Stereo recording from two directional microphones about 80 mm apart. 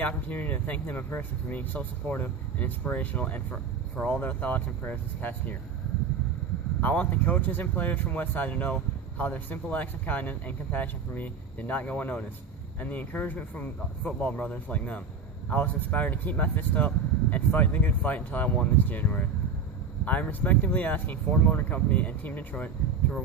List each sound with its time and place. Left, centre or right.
0.0 s speech: centre
6.8 s speech: centre